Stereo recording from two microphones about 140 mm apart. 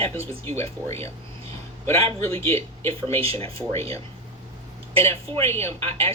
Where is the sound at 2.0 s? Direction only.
45° right (ahead or behind).